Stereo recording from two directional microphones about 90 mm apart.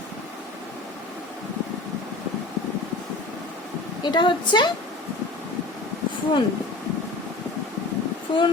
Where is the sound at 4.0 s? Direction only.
55° left (ahead or behind).